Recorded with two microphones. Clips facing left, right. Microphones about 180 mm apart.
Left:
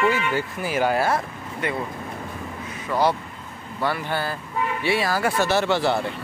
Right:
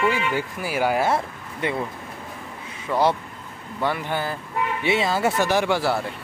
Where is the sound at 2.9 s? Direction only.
Centre (ahead or behind).